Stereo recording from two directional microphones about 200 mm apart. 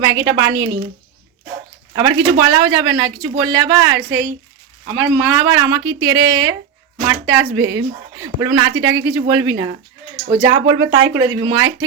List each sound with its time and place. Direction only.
0.4 s speech: 20° right (ahead or behind)
2.0 s speech: 20° right (ahead or behind)
10.5 s speech: 75° right (ahead or behind)
11.3 s speech: 20° right (ahead or behind)